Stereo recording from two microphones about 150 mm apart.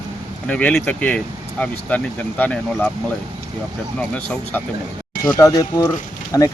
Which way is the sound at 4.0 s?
10° left (ahead or behind).